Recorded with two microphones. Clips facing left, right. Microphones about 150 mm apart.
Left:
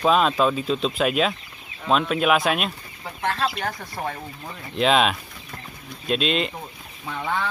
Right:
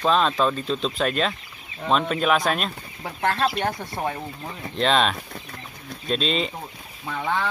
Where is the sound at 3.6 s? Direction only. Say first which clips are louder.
Right 3 dB; 25° right (ahead or behind).